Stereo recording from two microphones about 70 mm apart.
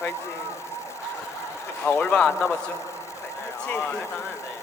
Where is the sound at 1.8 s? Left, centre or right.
Left.